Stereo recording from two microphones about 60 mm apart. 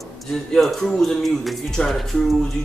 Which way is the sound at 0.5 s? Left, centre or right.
Centre.